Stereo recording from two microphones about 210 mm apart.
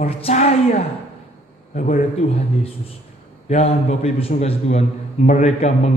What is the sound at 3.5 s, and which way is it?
A man's voice, 30° left (ahead or behind).